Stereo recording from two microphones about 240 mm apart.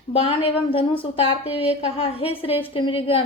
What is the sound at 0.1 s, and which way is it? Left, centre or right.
A woman's voice, left.